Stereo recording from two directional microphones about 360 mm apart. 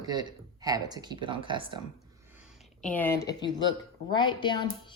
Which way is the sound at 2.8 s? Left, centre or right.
Centre.